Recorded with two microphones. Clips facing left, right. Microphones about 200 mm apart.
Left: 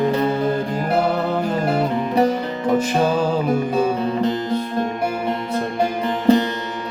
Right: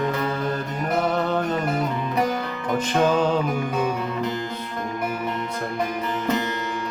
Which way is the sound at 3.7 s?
30° left (ahead or behind).